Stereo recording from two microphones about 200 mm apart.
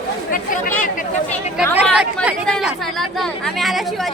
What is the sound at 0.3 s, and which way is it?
Chatter, 45° left (ahead or behind).